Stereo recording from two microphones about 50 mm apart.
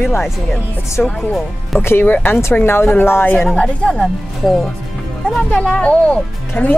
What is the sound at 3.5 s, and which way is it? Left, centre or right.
Speech, centre.